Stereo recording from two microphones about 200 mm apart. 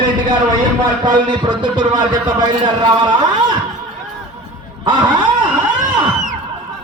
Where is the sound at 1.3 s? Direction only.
20° right (ahead or behind).